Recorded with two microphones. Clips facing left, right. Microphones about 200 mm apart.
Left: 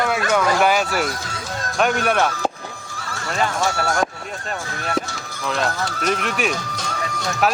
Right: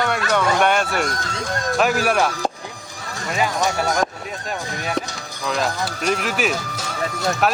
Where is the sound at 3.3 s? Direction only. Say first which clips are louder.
Right 1 dB; 10° right (ahead or behind).